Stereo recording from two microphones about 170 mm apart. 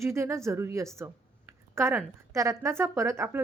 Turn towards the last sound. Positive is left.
turn(degrees=-15)  # may be behind; listen again after turning